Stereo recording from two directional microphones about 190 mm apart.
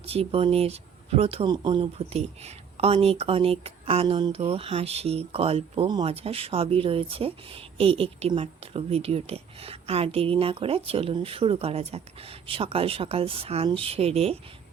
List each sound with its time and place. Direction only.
0.0 s speech: 30° right (ahead or behind)